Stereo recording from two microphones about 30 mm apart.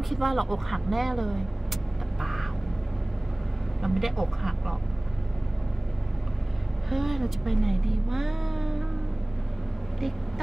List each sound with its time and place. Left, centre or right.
0.1 s vehicle: centre
3.8 s speech: centre
6.9 s speech: centre
9.9 s vehicle: centre